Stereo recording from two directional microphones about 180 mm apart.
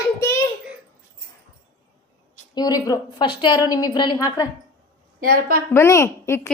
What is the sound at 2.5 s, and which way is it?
A woman's voice, 20° left (ahead or behind).